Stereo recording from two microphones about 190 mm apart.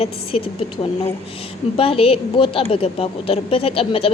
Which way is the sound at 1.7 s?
30° left (ahead or behind).